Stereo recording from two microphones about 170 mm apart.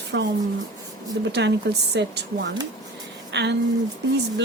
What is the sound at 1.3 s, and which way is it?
Speech, 80° right.